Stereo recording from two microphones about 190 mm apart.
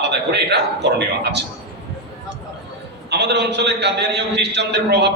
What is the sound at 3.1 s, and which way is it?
A man's voice, 60° right (ahead or behind).